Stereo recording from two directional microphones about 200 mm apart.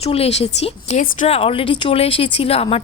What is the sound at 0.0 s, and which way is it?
Speech, 30° left (ahead or behind).